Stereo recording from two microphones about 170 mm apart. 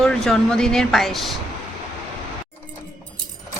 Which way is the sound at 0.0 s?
5° left (ahead or behind).